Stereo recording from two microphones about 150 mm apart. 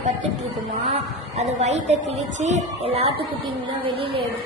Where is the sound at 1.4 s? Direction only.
50° right (ahead or behind).